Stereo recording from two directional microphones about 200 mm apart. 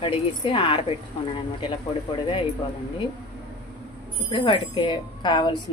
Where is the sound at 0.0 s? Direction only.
25° left (ahead or behind).